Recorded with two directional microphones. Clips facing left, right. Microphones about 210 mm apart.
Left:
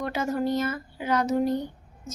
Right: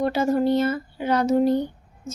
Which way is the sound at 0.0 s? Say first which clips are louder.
Right 6 dB; 30° right (ahead or behind).